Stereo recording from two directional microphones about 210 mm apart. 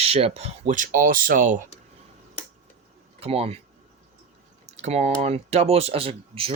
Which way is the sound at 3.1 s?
30° right (ahead or behind).